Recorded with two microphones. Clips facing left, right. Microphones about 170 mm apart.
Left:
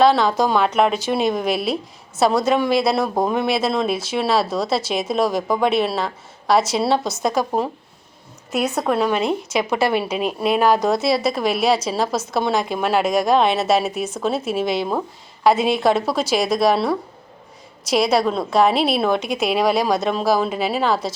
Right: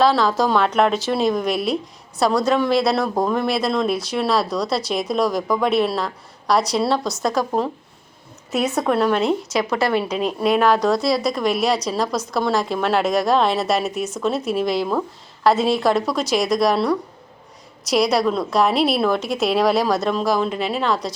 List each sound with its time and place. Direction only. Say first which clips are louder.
0.0 s a woman's voice: left 1 dB; centre (ahead or behind)
9.7 s a woman's voice: left 1 dB; 25° left (ahead or behind)
10.0 s a woman's voice: right 1 dB; 5° left (ahead or behind)